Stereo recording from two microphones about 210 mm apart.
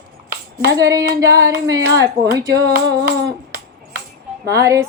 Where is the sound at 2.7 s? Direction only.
45° right (ahead or behind).